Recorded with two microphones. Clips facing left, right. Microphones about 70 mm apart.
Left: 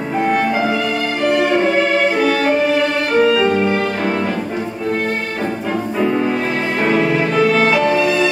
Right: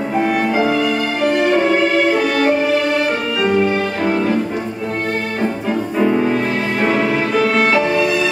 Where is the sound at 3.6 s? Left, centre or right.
Centre.